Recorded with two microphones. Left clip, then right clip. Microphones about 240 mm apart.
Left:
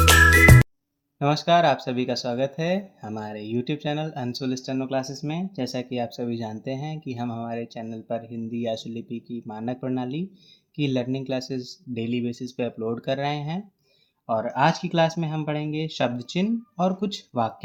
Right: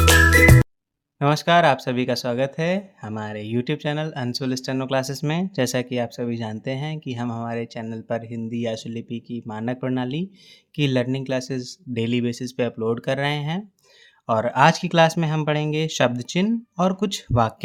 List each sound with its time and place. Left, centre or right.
0.0 s music: centre
1.2 s speech: right